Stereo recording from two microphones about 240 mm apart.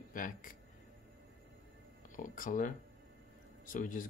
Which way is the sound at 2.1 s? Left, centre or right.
Left.